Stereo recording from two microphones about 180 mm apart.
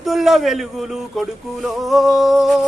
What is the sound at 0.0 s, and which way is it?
Speech, centre (ahead or behind).